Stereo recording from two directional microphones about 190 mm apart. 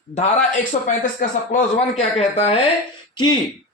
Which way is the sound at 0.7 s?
45° left (ahead or behind).